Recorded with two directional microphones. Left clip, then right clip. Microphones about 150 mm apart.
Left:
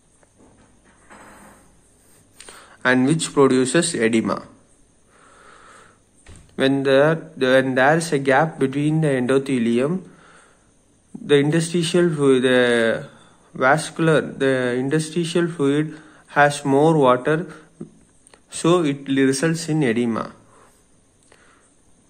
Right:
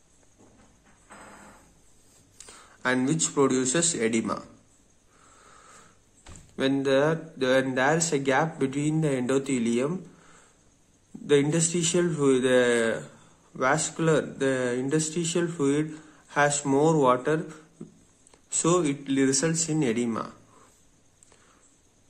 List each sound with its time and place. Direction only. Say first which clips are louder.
2.3 s a sound: left 7 dB; 15° left (ahead or behind)
3.3 s speech: left 8 dB; 20° left (ahead or behind)
6.5 s speech: left 7 dB; 15° left (ahead or behind)